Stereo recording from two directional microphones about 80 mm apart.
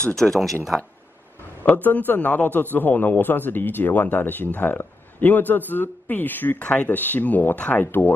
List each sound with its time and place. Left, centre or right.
0.0 s speech: centre
1.6 s a man's voice: left